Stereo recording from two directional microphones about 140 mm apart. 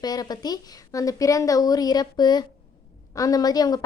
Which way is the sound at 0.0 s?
30° left (ahead or behind).